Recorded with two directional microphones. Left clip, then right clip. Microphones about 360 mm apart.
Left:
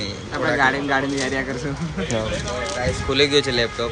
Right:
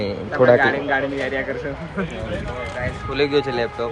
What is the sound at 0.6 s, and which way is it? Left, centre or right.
Speech, centre.